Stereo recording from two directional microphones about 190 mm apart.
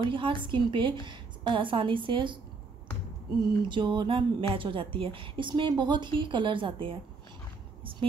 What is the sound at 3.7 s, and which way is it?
Speech, 25° right (ahead or behind).